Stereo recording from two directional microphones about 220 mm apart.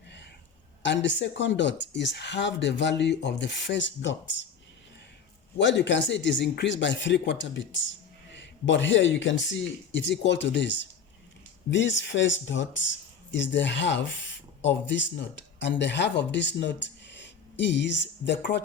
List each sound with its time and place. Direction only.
0.8 s speech: 55° left (ahead or behind)
5.5 s speech: 55° left (ahead or behind)